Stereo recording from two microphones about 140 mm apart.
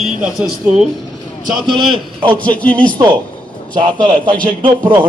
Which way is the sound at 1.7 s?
35° right (ahead or behind).